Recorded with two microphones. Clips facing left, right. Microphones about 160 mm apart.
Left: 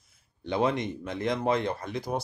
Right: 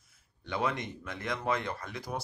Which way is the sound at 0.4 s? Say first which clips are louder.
Left 6 dB; 25° left (ahead or behind).